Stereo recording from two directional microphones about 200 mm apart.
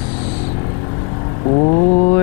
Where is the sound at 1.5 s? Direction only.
30° left (ahead or behind).